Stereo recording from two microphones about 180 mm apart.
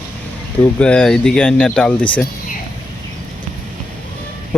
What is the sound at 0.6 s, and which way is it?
Speech, 5° left (ahead or behind).